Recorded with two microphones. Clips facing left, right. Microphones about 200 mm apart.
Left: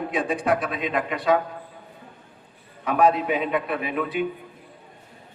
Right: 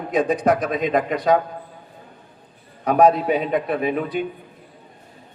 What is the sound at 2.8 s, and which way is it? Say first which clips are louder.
A man's voice: right 4 dB; 40° right (ahead or behind).